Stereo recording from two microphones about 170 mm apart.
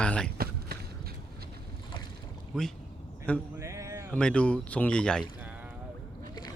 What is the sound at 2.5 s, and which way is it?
Speech, centre (ahead or behind).